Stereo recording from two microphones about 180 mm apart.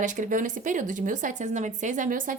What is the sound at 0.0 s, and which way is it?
Speech, 45° right (ahead or behind).